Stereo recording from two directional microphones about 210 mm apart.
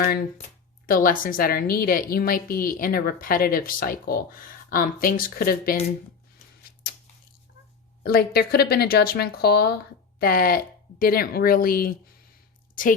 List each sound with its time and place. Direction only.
0.9 s a woman's voice: 40° left (ahead or behind)
8.0 s a woman's voice: 45° left (ahead or behind)